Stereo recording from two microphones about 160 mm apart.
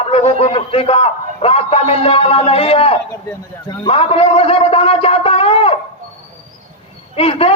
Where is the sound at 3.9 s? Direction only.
35° left (ahead or behind).